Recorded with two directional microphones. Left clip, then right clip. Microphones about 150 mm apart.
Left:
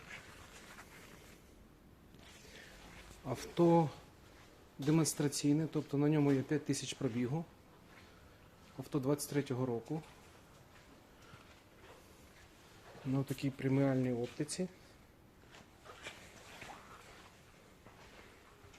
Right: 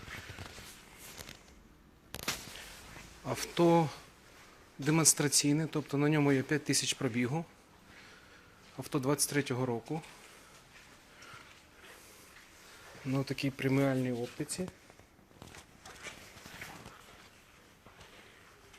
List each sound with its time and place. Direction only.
3.2 s speech: centre (ahead or behind); by 7.4 s 20° right (ahead or behind)
8.8 s speech: 20° right (ahead or behind)
13.1 s speech: 15° right (ahead or behind); by 14.7 s centre (ahead or behind)